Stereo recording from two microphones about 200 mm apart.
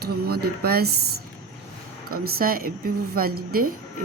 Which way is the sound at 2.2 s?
45° right (ahead or behind).